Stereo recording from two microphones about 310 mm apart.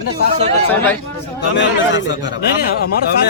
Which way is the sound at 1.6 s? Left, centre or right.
Left.